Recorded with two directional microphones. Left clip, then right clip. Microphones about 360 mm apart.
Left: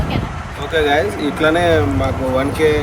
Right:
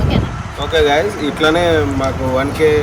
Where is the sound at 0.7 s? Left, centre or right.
Centre.